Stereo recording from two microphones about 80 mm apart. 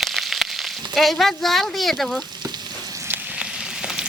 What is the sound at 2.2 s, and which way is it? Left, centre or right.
Frying, right.